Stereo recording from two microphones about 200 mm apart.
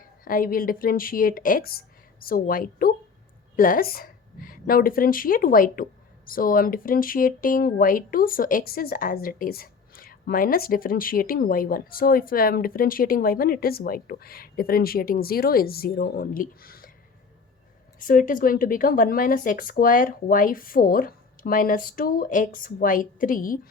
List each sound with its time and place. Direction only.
0.3 s a woman's voice: 45° left (ahead or behind)
18.0 s a woman's voice: 45° left (ahead or behind)